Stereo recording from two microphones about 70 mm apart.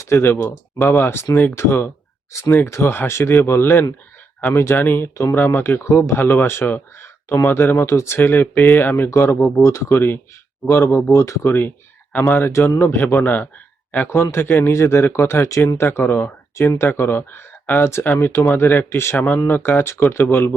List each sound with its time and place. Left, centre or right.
0.0 s speech: left
5.8 s speech: left
9.0 s a man's voice: left
11.4 s speech: left
12.5 s a man's voice: left
13.0 s speech: left
19.1 s speech: left